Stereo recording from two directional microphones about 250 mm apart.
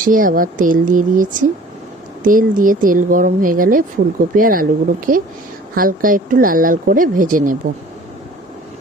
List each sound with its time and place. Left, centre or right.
0.0 s speech: right